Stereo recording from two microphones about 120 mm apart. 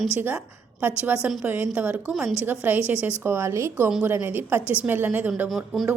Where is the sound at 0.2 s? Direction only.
15° right (ahead or behind).